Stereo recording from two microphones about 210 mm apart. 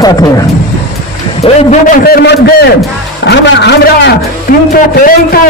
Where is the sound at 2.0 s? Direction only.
50° left (ahead or behind).